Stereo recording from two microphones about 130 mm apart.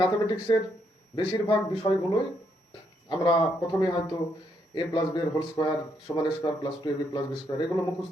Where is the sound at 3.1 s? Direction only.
35° left (ahead or behind).